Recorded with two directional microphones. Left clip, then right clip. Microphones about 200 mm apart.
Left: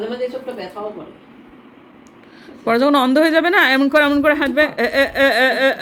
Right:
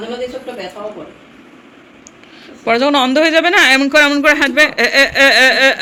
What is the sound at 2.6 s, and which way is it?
A man's voice, 20° left (ahead or behind).